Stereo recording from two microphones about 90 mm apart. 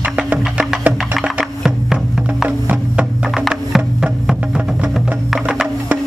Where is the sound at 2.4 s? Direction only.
15° right (ahead or behind).